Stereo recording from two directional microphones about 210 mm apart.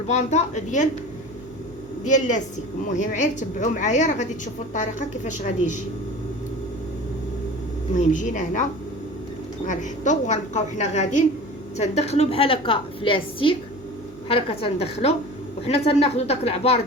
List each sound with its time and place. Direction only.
0.1 s a woman's voice: 30° left (ahead or behind)
2.0 s a woman's voice: 35° left (ahead or behind)
7.9 s a woman's voice: 35° left (ahead or behind)
9.6 s a woman's voice: 35° left (ahead or behind)